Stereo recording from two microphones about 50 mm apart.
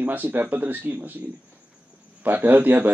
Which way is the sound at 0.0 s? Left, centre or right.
Right.